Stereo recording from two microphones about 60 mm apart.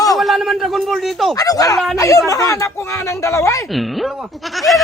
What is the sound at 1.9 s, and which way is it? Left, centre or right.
Speech, left.